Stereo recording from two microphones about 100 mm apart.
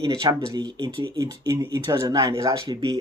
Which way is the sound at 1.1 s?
35° right (ahead or behind).